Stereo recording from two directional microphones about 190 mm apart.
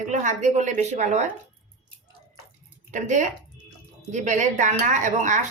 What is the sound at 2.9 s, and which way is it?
Speech, 40° right (ahead or behind).